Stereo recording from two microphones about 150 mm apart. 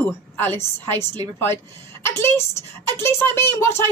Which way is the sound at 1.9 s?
15° left (ahead or behind).